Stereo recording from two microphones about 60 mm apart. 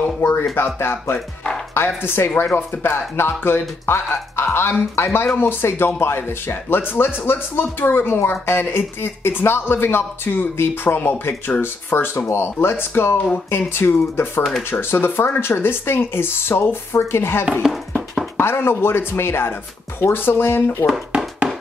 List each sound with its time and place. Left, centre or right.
0.2 s a man's voice: left
17.6 s a sound: centre
18.4 s a man's voice: left